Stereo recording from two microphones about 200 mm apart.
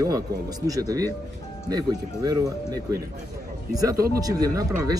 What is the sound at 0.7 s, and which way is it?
Speech, 15° right (ahead or behind).